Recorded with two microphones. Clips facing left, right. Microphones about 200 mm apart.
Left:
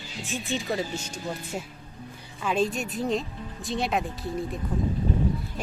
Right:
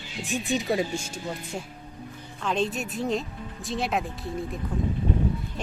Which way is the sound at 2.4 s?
5° left (ahead or behind).